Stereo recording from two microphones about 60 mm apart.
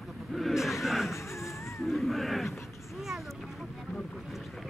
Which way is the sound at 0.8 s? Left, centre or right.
Centre.